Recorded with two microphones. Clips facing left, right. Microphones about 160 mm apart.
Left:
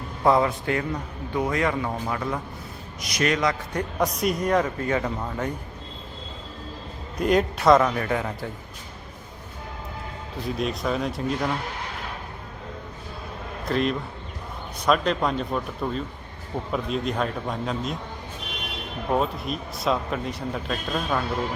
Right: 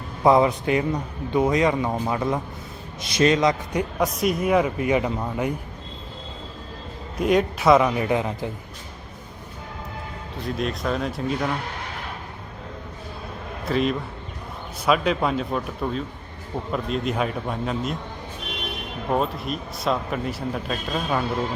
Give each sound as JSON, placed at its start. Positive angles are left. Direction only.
{"t": 0.2, "sound": "a man's voice", "side_deg": -15}
{"t": 3.9, "sound": "a man's voice", "side_deg": 0}
{"t": 7.2, "sound": "a man's voice", "side_deg": 0}
{"t": 10.3, "sound": "speech", "side_deg": 0}
{"t": 13.7, "sound": "speech", "side_deg": 0}
{"t": 19.0, "sound": "speech", "side_deg": 0}